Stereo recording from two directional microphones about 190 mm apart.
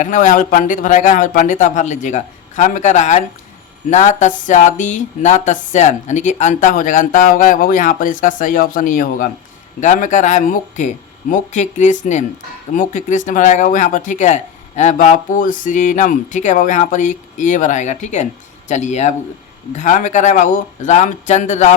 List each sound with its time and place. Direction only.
0.0 s speech: 40° left (ahead or behind)